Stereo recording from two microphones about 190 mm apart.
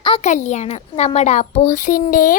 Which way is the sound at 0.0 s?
35° left (ahead or behind).